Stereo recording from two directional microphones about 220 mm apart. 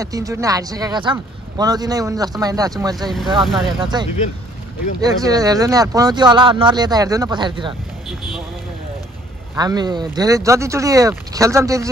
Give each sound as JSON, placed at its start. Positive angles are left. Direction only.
{"t": 0.0, "sound": "speech", "side_deg": -15}
{"t": 3.4, "sound": "speech", "side_deg": 0}
{"t": 3.8, "sound": "speech", "side_deg": -20}
{"t": 9.6, "sound": "speech", "side_deg": -20}